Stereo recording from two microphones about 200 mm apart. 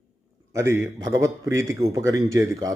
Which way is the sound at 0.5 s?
15° right (ahead or behind).